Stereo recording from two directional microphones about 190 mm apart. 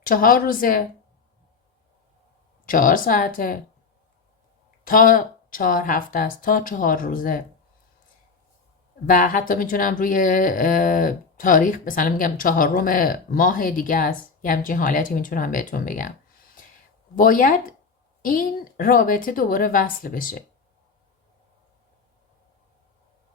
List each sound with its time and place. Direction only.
0.0 s speech: 50° left (ahead or behind)
2.6 s speech: 45° left (ahead or behind)
4.9 s speech: 45° left (ahead or behind)
9.0 s speech: 45° left (ahead or behind)
17.2 s speech: 45° left (ahead or behind)